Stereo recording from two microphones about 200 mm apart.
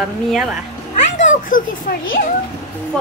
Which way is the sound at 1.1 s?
40° left (ahead or behind).